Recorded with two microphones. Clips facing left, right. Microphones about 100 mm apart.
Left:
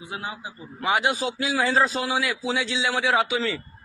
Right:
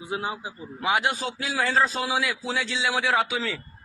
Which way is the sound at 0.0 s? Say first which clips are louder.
Right 3 dB; 25° right (ahead or behind).